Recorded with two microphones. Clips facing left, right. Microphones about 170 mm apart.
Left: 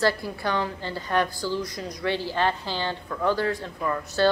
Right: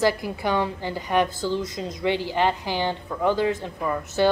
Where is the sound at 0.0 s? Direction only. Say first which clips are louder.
Right 2 dB; 15° right (ahead or behind).